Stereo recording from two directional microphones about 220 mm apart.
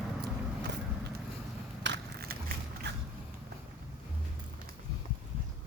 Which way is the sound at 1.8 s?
50° right (ahead or behind).